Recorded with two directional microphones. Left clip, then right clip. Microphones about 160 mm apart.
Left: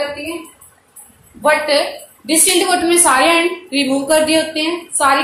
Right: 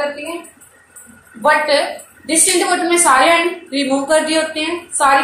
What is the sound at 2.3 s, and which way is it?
A woman's voice, 45° left (ahead or behind).